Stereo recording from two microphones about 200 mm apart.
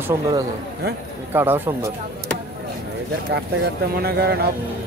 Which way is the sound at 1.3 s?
10° right (ahead or behind).